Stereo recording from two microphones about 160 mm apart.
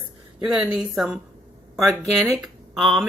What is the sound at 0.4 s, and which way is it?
Speech, 5° right (ahead or behind).